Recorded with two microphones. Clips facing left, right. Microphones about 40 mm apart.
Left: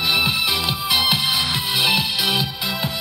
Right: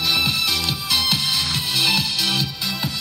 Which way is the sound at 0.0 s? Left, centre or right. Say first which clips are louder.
Left 1 dB; centre.